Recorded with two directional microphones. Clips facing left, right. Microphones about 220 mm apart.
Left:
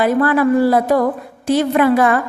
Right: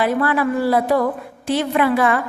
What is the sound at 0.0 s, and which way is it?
A woman's voice, 45° left (ahead or behind).